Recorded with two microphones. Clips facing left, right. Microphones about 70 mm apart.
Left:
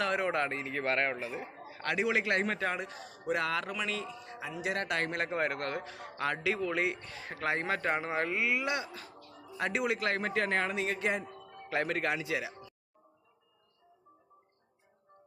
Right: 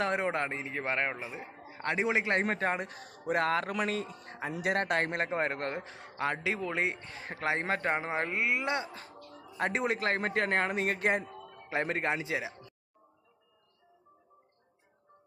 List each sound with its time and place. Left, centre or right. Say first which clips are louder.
0.0 s a man's voice: even; right
8.6 s a man's voice: right 1 dB; right
11.7 s a man's voice: even; right